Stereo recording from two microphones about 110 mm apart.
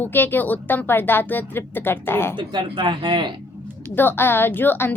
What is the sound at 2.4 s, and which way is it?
Speech, 45° right (ahead or behind).